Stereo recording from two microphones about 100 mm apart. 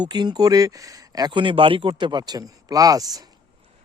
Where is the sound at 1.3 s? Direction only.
55° right (ahead or behind); by 3.2 s 40° right (ahead or behind).